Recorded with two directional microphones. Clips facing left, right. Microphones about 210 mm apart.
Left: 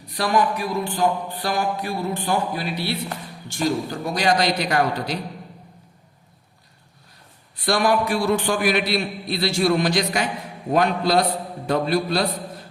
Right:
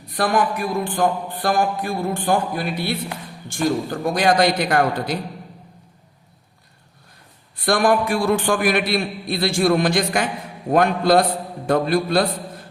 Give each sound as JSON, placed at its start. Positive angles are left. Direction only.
{"t": 0.1, "sound": "speech", "side_deg": -50}
{"t": 4.0, "sound": "speech", "side_deg": -50}
{"t": 7.5, "sound": "speech", "side_deg": -50}